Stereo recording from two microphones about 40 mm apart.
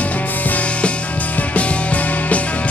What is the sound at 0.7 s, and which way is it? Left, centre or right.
Music, left.